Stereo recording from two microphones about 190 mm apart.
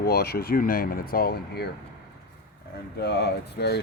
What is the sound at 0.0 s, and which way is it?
Speech, 55° left (ahead or behind).